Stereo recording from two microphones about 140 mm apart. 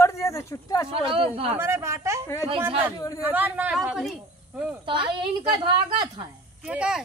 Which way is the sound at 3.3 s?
10° right (ahead or behind).